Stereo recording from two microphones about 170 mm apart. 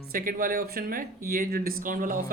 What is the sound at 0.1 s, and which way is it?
Speech, 55° right (ahead or behind).